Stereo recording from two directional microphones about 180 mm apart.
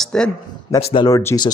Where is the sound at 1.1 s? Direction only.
15° left (ahead or behind).